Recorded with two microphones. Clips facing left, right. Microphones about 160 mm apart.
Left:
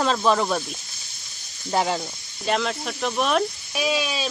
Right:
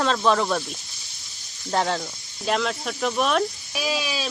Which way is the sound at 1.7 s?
5° left (ahead or behind).